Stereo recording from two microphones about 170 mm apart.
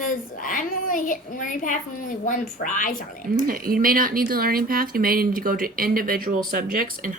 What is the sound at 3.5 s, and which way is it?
Speech, 60° right (ahead or behind).